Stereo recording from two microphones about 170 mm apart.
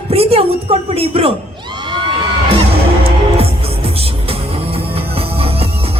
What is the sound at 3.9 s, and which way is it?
Music, 35° right (ahead or behind).